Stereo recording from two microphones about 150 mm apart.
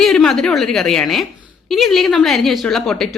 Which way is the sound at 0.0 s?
Centre (ahead or behind).